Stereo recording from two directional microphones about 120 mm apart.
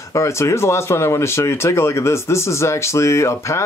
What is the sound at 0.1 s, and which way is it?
Speech, 25° left (ahead or behind).